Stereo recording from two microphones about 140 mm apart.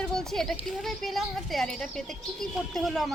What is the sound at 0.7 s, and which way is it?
A woman's voice, centre (ahead or behind).